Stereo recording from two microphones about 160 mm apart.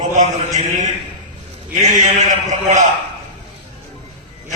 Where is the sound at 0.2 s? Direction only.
50° right (ahead or behind).